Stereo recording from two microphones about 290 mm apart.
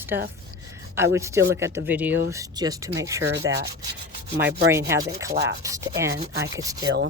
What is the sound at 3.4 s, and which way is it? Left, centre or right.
Speech, right.